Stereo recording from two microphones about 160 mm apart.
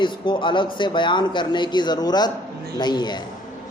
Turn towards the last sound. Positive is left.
turn(degrees=25)  # may be behind; listen again after turning